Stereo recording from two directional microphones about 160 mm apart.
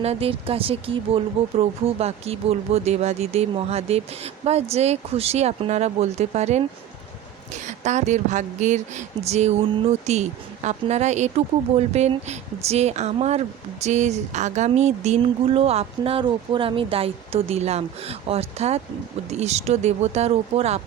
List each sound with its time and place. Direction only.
0.0 s speech: 40° right (ahead or behind)